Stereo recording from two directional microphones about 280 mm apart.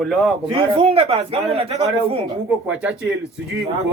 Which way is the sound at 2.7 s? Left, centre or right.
Centre.